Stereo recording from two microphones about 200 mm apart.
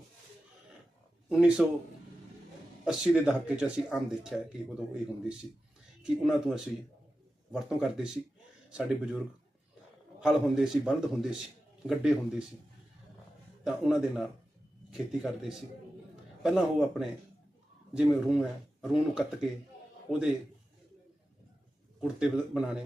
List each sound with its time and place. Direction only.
1.3 s speech: 5° right (ahead or behind)
2.8 s speech: 5° right (ahead or behind)
6.0 s speech: 5° right (ahead or behind)
13.7 s a man's voice: centre (ahead or behind)
22.0 s speech: 5° right (ahead or behind)